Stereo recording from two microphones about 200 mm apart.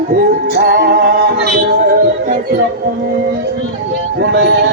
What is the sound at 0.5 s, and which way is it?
Music, 55° right (ahead or behind).